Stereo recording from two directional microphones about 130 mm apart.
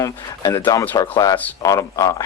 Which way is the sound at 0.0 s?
25° left (ahead or behind).